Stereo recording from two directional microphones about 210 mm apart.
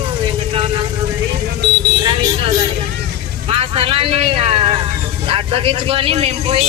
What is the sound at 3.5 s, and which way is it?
A man's voice, 25° right (ahead or behind).